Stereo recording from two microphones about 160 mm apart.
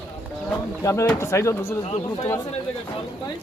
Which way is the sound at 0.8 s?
20° left (ahead or behind).